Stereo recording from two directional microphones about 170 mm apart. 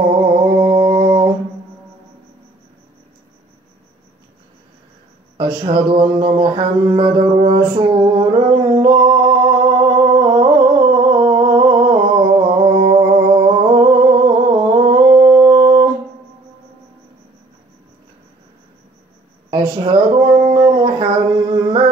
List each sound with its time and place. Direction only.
0.2 s mantra: 25° right (ahead or behind)
5.4 s music: 25° right (ahead or behind)
10.2 s humming: 25° right (ahead or behind)
19.5 s a sound: 25° right (ahead or behind)